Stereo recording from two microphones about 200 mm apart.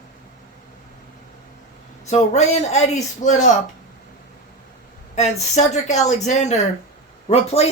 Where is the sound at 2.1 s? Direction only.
35° left (ahead or behind).